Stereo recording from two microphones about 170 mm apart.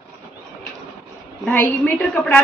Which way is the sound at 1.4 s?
10° left (ahead or behind).